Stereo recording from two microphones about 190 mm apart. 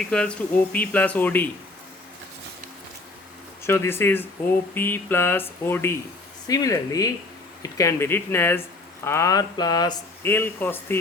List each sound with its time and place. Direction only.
0.1 s speech: 5° left (ahead or behind)
3.6 s speech: 15° left (ahead or behind)
10.3 s speech: 10° left (ahead or behind)